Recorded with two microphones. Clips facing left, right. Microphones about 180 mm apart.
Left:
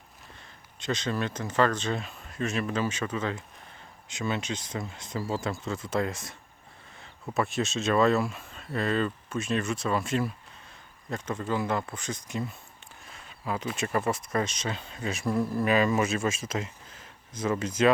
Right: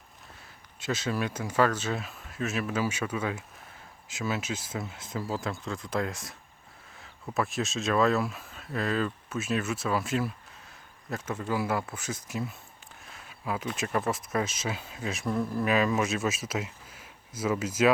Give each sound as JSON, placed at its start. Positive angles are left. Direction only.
{"t": 0.8, "sound": "speech", "side_deg": -5}